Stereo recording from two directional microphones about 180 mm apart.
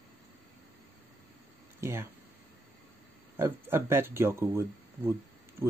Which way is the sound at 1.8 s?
15° right (ahead or behind).